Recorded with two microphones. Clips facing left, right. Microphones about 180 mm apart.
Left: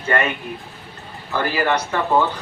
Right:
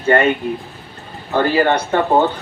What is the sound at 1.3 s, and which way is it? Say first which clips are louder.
Speech: right 5 dB; 30° right (ahead or behind).